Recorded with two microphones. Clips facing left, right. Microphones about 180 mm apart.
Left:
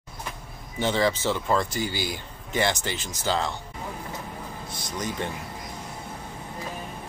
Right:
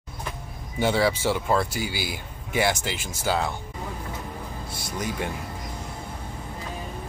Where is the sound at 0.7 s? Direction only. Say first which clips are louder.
Right 1 dB; 10° right (ahead or behind).